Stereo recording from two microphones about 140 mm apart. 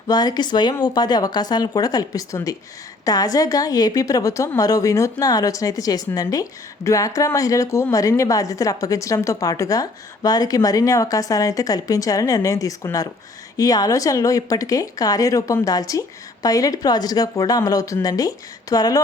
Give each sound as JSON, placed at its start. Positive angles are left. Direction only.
{"t": 0.1, "sound": "speech", "side_deg": 30}